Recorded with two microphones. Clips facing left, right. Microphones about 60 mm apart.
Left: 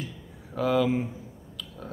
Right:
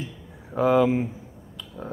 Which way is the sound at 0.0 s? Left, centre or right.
Right.